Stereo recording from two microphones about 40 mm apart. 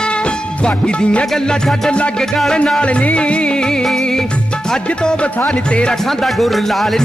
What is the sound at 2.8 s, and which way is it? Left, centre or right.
Music, left.